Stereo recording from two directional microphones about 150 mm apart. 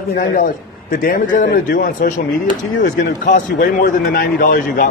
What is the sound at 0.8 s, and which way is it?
A man's voice, 75° left (ahead or behind).